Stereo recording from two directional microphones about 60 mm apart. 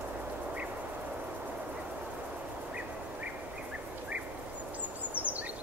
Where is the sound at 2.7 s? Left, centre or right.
Right.